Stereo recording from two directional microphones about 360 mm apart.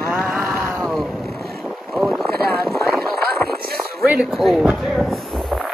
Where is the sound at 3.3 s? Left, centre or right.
Right.